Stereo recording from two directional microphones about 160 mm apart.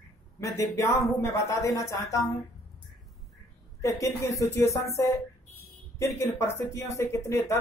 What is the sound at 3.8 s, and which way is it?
A woman's voice, 20° left (ahead or behind).